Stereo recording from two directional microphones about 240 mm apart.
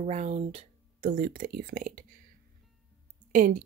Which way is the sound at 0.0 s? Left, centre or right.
Right.